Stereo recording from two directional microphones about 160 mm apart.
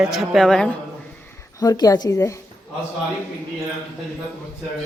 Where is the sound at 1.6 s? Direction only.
20° left (ahead or behind).